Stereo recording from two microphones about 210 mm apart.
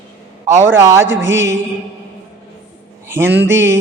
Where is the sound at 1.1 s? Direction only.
60° right (ahead or behind).